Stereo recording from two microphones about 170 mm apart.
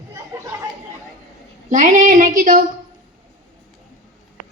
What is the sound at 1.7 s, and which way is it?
Speech, 45° right (ahead or behind).